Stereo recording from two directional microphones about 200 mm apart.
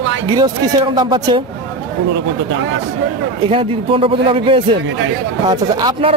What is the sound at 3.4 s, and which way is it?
Speech, 25° right (ahead or behind).